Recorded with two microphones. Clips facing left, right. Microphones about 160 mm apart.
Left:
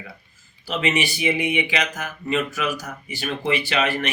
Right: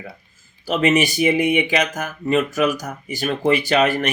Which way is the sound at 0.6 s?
45° right (ahead or behind).